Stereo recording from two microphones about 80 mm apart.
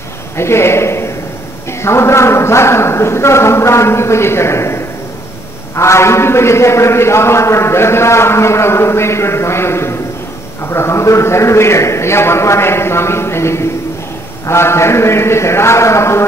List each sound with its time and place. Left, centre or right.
0.4 s a man's voice: left